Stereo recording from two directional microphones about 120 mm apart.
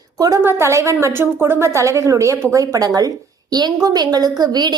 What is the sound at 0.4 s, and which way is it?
A woman's voice, 25° right (ahead or behind).